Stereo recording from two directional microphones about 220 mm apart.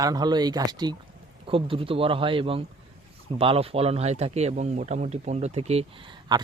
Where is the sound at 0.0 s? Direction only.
15° right (ahead or behind).